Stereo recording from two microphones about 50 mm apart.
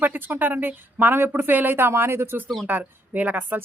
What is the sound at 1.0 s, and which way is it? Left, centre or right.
Speech, right.